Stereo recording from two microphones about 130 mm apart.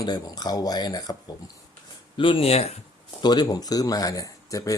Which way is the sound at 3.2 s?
35° left (ahead or behind).